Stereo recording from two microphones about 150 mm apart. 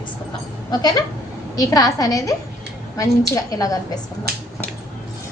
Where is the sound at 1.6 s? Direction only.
25° left (ahead or behind).